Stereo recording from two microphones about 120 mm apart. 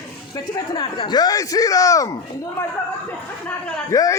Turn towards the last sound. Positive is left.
turn(degrees=25)  # may be behind; listen again after turning